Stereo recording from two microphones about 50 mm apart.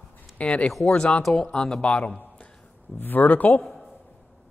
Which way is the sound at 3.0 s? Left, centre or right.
Left.